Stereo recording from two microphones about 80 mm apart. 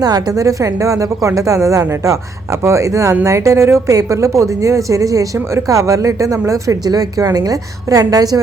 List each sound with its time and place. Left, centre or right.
0.0 s a woman's voice: right